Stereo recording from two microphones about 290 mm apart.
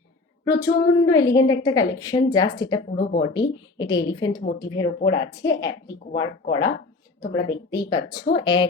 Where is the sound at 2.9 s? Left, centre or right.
Left.